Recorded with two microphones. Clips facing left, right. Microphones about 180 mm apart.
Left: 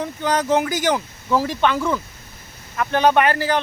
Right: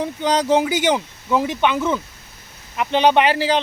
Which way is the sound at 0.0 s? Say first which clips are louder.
Right 2 dB; 20° right (ahead or behind).